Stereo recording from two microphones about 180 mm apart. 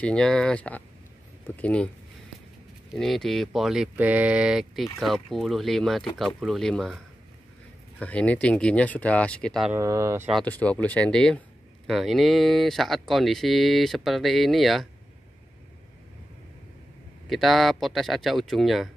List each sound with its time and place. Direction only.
0.0 s speech: 5° left (ahead or behind)
2.9 s speech: centre (ahead or behind)
8.0 s speech: 5° left (ahead or behind)
9.7 s speech: 15° right (ahead or behind)
10.3 s speech: 10° left (ahead or behind)
17.3 s speech: centre (ahead or behind)